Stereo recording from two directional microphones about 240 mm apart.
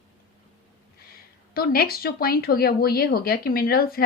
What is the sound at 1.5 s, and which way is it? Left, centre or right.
A woman's voice, left.